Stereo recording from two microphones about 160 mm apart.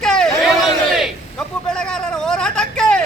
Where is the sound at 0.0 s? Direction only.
5° left (ahead or behind).